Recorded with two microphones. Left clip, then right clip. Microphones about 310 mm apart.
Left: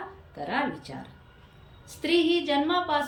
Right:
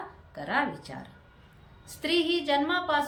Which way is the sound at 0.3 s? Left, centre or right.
Centre.